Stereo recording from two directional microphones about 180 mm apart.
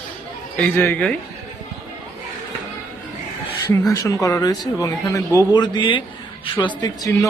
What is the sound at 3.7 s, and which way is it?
A man's voice, 20° left (ahead or behind).